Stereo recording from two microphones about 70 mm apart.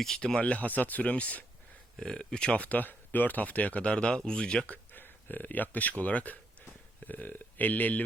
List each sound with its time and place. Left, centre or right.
0.0 s speech: centre
0.3 s speech: centre